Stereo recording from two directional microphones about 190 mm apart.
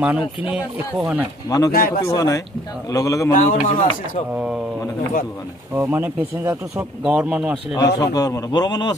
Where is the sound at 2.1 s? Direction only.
20° left (ahead or behind).